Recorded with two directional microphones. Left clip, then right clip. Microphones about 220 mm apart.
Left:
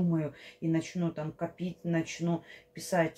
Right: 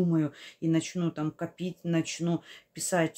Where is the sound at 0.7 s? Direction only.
40° right (ahead or behind).